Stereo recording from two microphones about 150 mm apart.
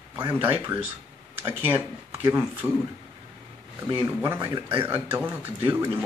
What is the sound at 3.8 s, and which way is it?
Speech, 20° right (ahead or behind).